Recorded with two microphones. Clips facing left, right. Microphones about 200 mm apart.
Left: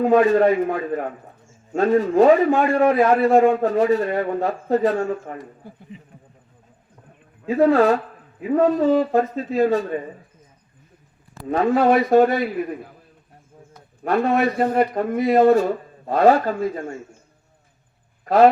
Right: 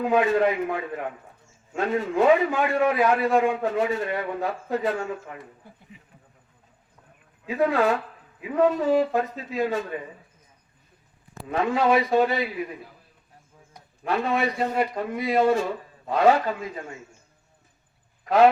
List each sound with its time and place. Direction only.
0.0 s a man's voice: 40° left (ahead or behind)
7.4 s a man's voice: 40° left (ahead or behind)
11.4 s a man's voice: 40° left (ahead or behind)
14.0 s a man's voice: 45° left (ahead or behind)